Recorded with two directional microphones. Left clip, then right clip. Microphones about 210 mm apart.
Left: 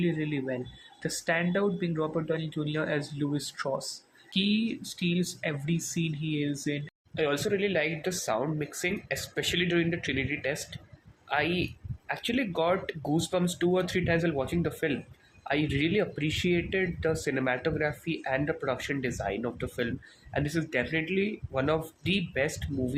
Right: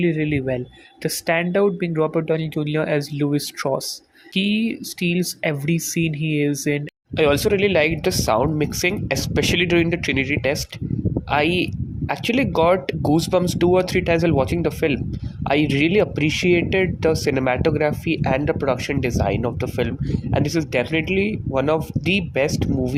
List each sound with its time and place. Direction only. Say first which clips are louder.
0.0 s speech: right 10 dB; 30° right (ahead or behind)